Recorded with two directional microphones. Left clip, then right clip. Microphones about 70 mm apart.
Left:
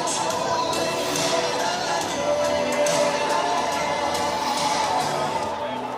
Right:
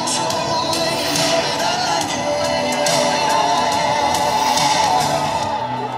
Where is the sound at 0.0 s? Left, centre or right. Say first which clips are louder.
Right 4 dB; right.